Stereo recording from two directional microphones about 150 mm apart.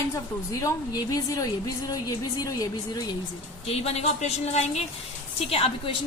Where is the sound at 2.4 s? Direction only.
25° left (ahead or behind).